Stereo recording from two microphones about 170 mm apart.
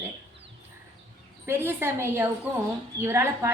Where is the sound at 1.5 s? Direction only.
10° right (ahead or behind).